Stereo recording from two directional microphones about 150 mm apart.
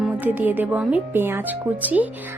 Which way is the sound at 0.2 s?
10° right (ahead or behind).